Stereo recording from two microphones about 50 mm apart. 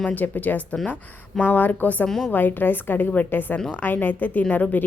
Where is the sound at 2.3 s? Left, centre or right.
Left.